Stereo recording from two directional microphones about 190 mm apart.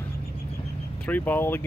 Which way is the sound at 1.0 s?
10° left (ahead or behind).